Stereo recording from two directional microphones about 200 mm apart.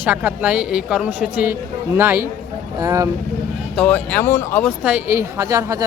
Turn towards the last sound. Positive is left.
turn(degrees=-15)  # may be behind; listen again after turning